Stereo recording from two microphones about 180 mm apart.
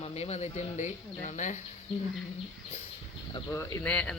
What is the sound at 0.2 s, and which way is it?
Speech, 35° left (ahead or behind).